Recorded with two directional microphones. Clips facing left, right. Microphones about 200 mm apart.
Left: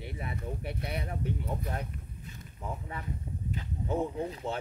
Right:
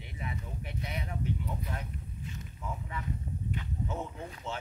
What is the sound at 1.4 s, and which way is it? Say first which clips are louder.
Speech: left 3 dB; 45° left (ahead or behind).